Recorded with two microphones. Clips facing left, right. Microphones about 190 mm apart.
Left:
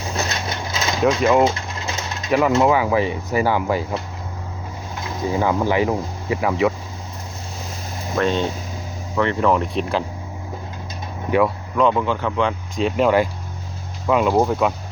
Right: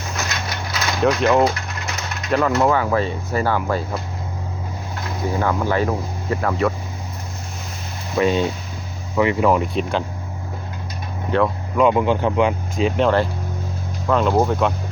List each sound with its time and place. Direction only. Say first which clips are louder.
0.1 s a sound: left 3 dB; 30° left (ahead or behind)
1.0 s speech: even; 5° left (ahead or behind)
2.6 s speech: left 1 dB; 10° left (ahead or behind)
5.3 s speech: left 2 dB; 15° left (ahead or behind)
8.2 s speech: right 2 dB; 5° right (ahead or behind)
11.3 s speech: left 1 dB; 10° left (ahead or behind)
11.8 s speech: right 2 dB; 15° right (ahead or behind)
14.1 s speech: left 1 dB; 5° left (ahead or behind)